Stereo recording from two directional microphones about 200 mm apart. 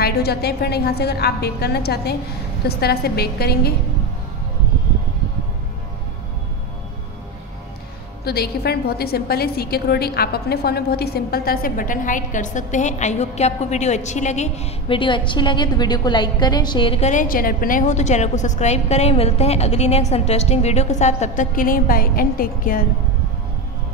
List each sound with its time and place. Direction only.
0.0 s a woman's voice: 50° left (ahead or behind)
8.3 s a woman's voice: 50° left (ahead or behind)